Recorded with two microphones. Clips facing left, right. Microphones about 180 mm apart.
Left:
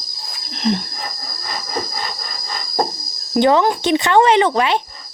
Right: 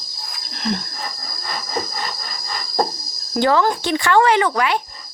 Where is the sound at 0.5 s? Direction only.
20° left (ahead or behind).